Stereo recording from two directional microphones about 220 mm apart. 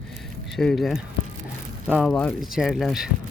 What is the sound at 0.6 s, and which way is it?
Speech, centre (ahead or behind).